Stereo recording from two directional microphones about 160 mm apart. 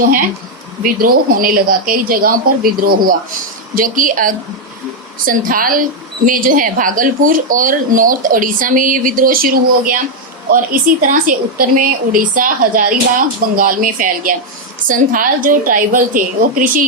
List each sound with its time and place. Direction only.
0.0 s a woman's voice: 60° right (ahead or behind)